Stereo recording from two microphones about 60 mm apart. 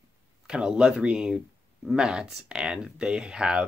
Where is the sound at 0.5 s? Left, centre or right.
Centre.